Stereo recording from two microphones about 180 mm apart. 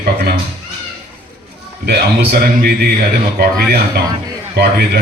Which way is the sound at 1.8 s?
60° right (ahead or behind).